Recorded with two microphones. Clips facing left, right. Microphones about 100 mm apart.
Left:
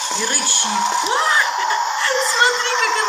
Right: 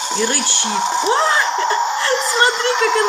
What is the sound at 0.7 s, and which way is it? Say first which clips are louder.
Speech: right 2 dB; 15° right (ahead or behind).